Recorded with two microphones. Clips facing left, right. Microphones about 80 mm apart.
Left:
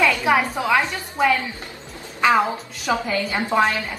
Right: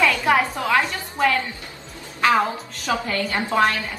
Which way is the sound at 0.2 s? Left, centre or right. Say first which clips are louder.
Even; centre.